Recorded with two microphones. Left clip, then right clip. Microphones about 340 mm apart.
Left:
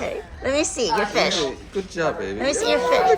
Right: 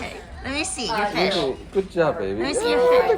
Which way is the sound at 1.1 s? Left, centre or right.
Centre.